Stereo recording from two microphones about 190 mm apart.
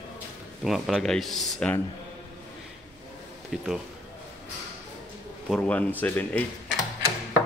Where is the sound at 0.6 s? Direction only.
Centre (ahead or behind).